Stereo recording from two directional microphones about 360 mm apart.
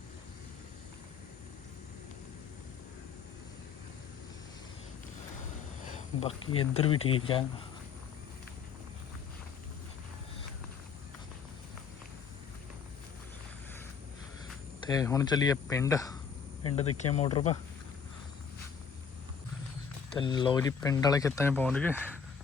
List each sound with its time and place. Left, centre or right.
5.9 s speech: centre
14.8 s speech: centre
20.1 s speech: centre